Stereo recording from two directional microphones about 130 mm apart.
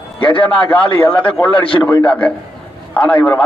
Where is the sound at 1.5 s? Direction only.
45° left (ahead or behind).